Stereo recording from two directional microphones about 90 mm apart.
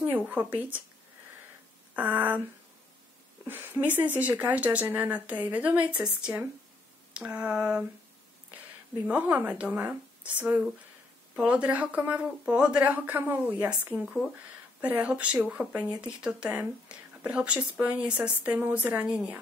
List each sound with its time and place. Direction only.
0.6 s speech: 15° right (ahead or behind)
2.0 s speech: 20° right (ahead or behind)
3.4 s speech: 25° right (ahead or behind)
9.0 s speech: 15° right (ahead or behind)